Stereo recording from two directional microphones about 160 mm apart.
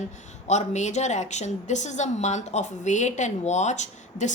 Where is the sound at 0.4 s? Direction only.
45° left (ahead or behind).